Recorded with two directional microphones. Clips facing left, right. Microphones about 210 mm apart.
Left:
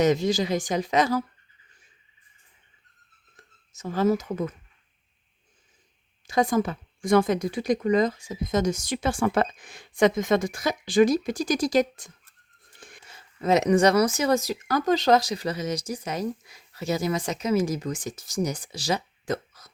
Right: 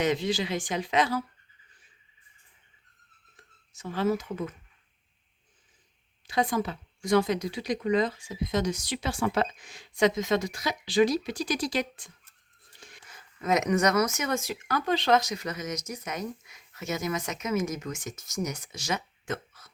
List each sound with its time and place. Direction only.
0.0 s speech: 40° left (ahead or behind)
3.3 s speech: 40° left (ahead or behind)
6.2 s speech: 45° left (ahead or behind)
13.1 s speech: 30° left (ahead or behind)